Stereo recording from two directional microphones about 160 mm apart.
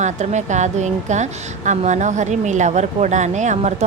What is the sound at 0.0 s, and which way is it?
A woman's voice, 45° right (ahead or behind).